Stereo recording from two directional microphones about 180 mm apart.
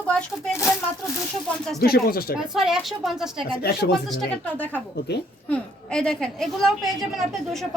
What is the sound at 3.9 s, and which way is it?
A woman's voice, centre (ahead or behind).